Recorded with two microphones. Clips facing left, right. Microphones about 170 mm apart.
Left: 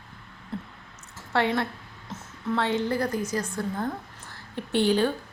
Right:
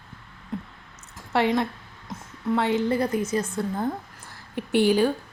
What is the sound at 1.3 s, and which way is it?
Speech, 20° right (ahead or behind).